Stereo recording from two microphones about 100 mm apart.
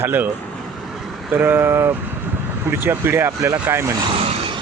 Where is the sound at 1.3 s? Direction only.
20° right (ahead or behind).